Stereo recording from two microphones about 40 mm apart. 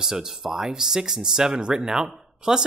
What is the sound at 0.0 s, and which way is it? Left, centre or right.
Speech, centre.